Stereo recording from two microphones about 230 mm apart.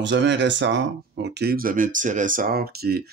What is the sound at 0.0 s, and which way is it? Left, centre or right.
Speech, right.